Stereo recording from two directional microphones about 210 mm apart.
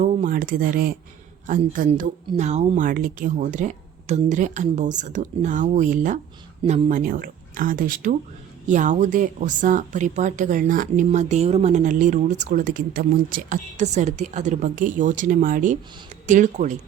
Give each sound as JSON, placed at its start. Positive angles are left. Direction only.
{"t": 0.0, "sound": "speech", "side_deg": -35}